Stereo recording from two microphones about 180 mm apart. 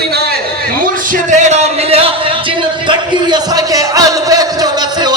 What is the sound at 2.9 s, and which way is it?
Music, 20° right (ahead or behind).